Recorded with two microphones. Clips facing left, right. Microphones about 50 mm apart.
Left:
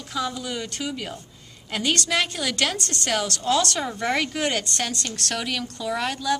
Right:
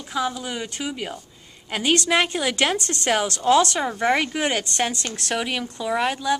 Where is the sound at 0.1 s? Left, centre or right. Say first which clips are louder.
Right 2 dB; centre.